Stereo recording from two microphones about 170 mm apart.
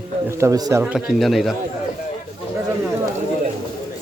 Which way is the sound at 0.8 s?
5° right (ahead or behind).